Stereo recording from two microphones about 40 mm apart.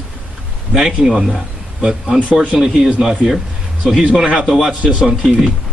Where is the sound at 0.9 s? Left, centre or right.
Centre.